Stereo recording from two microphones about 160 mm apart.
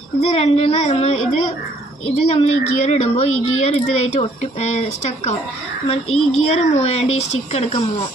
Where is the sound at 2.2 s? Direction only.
40° left (ahead or behind).